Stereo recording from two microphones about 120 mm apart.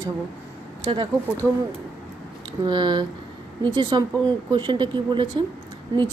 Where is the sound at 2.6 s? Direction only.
40° right (ahead or behind).